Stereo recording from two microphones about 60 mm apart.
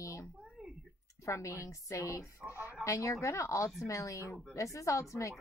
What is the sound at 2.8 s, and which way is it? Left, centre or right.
A woman's voice, left.